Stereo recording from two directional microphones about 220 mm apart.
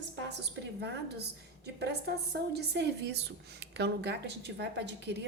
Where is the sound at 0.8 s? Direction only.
50° right (ahead or behind).